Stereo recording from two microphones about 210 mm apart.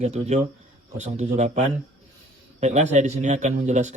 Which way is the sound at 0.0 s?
30° right (ahead or behind).